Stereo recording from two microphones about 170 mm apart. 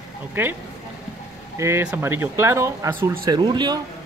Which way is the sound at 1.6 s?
15° right (ahead or behind).